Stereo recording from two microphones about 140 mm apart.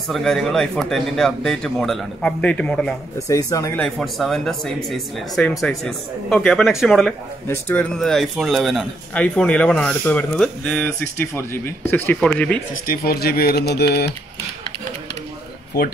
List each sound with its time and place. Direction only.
0.1 s a man's voice: centre (ahead or behind)
3.3 s speech: 25° left (ahead or behind)
3.8 s a man's voice: 5° left (ahead or behind)
7.4 s speech: 10° left (ahead or behind)
12.8 s speech: 90° left